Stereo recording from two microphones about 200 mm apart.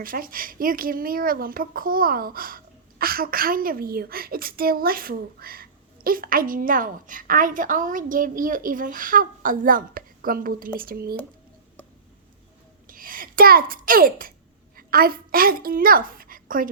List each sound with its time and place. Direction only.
0.0 s a woman's voice: 45° right (ahead or behind)
12.9 s a child's voice: 45° right (ahead or behind)